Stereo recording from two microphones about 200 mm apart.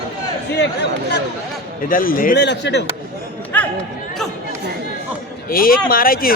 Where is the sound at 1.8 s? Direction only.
45° left (ahead or behind).